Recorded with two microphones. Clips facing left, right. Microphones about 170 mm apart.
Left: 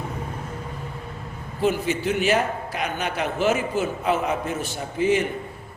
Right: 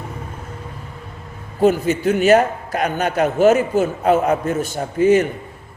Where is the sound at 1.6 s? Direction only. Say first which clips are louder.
Right 7 dB; 40° right (ahead or behind).